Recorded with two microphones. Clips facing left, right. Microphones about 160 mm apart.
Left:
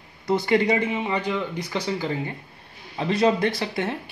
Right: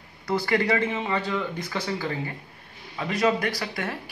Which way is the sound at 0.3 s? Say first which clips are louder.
Left 3 dB; 20° left (ahead or behind).